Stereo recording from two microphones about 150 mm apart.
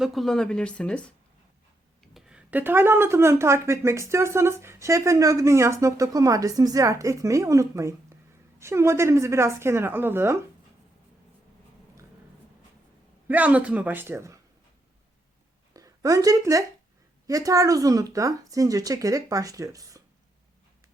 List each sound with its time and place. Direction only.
0.0 s speech: centre (ahead or behind)
2.1 s a woman's voice: 10° right (ahead or behind)
13.2 s a woman's voice: 10° right (ahead or behind)
15.7 s speech: 25° right (ahead or behind)